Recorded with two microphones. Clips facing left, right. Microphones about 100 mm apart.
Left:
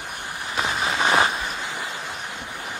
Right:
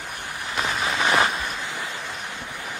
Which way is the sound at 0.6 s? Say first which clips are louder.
Left 1 dB; 20° left (ahead or behind).